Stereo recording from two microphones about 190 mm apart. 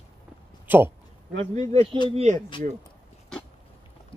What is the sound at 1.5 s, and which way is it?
Speech, 35° right (ahead or behind).